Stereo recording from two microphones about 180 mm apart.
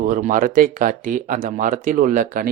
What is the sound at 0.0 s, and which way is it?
Speech, 50° right (ahead or behind).